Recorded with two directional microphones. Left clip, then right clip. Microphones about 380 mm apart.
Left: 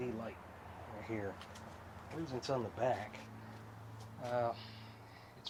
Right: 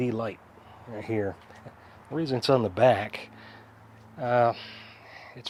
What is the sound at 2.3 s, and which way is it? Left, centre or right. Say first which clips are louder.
Speech: right 15 dB; right.